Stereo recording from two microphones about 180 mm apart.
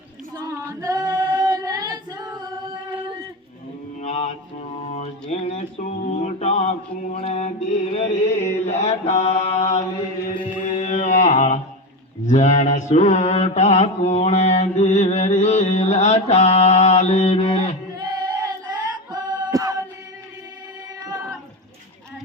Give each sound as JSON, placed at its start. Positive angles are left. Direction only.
{"t": 0.3, "sound": "female singing", "side_deg": -20}
{"t": 4.0, "sound": "mantra", "side_deg": 35}
{"t": 10.6, "sound": "music", "side_deg": 45}
{"t": 12.2, "sound": "mantra", "side_deg": 45}
{"t": 18.0, "sound": "a sound", "side_deg": -20}
{"t": 19.1, "sound": "music", "side_deg": -20}